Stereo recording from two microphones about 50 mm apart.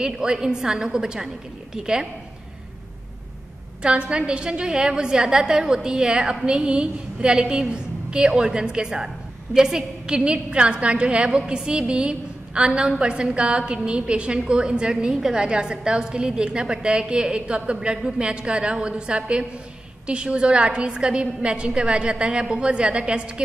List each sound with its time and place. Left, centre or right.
0.0 s a woman's voice: centre
3.8 s a woman's voice: right